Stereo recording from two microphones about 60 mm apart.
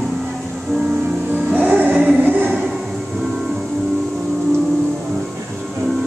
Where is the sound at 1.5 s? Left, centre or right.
Right.